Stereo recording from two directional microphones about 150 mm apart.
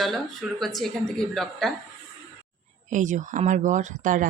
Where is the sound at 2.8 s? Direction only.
55° right (ahead or behind).